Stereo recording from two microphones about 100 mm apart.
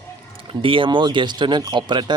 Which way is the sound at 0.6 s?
55° right (ahead or behind).